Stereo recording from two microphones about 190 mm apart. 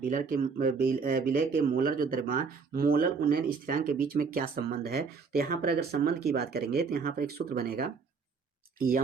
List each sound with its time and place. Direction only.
0.0 s speech: 45° right (ahead or behind)